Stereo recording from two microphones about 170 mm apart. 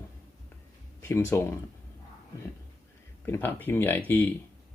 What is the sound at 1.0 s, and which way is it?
Speech, 15° left (ahead or behind).